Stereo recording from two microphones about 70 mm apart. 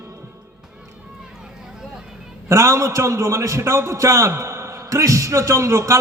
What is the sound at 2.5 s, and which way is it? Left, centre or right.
A man's voice, right.